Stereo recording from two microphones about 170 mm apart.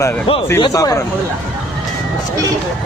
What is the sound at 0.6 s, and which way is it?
Speech, 20° left (ahead or behind).